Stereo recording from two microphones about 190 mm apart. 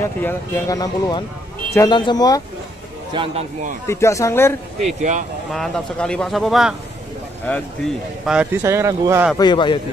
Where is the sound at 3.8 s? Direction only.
15° left (ahead or behind).